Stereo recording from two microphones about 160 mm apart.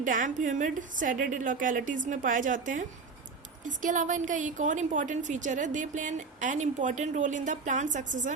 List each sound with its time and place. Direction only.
0.0 s a woman's voice: 55° right (ahead or behind)